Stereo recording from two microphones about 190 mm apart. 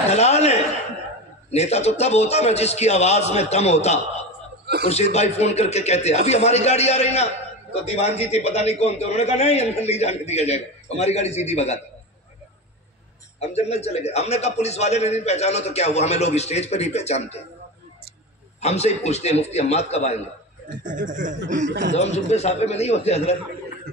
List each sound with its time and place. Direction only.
0.1 s chuckle: 35° left (ahead or behind)
1.5 s a man's voice: 35° left (ahead or behind)
13.4 s a man's voice: 35° left (ahead or behind)
18.6 s a man's voice: 35° left (ahead or behind)
20.8 s speech: 45° right (ahead or behind)
21.6 s speech: 65° right (ahead or behind)
21.9 s a man's voice: 35° left (ahead or behind)